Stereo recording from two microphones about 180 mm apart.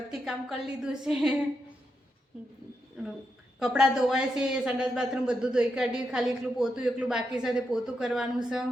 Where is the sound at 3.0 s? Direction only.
5° right (ahead or behind).